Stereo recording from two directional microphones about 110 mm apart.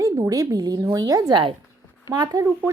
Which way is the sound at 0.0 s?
30° right (ahead or behind).